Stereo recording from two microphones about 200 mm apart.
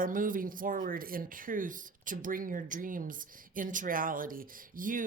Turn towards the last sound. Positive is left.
turn(degrees=-45)  # may be behind; listen again after turning